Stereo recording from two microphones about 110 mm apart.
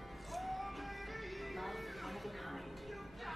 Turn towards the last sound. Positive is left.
turn(degrees=0)  # may be behind; listen again after turning